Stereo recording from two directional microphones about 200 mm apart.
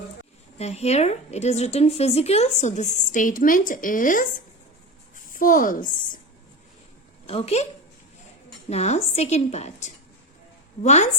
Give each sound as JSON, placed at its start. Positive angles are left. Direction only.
{"t": 0.6, "sound": "a woman's voice", "side_deg": 30}
{"t": 7.3, "sound": "a woman's voice", "side_deg": 30}
{"t": 8.7, "sound": "a woman's voice", "side_deg": 30}